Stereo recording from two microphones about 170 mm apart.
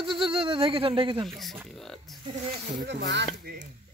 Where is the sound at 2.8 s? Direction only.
90° right.